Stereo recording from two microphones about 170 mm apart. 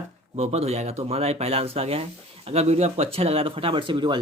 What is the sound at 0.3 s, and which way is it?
Speech, 40° right (ahead or behind).